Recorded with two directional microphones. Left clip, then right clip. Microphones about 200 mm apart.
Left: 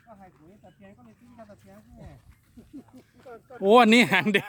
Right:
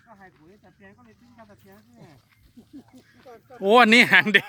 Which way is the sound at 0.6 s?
55° left (ahead or behind).